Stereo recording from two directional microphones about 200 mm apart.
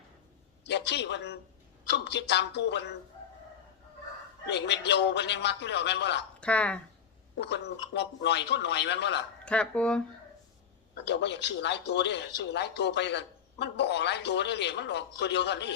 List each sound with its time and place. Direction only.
0.7 s speech: 60° left (ahead or behind)
4.4 s speech: 60° left (ahead or behind)
6.4 s speech: 5° left (ahead or behind)
7.3 s speech: 60° left (ahead or behind)
9.4 s speech: 5° left (ahead or behind)
10.9 s speech: 60° left (ahead or behind)